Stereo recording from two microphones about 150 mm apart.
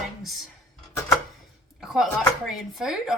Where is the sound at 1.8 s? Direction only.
Centre (ahead or behind).